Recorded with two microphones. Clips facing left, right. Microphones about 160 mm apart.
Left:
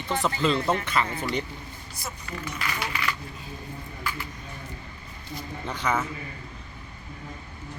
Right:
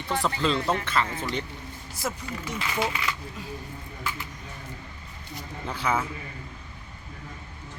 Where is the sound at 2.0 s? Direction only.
90° right.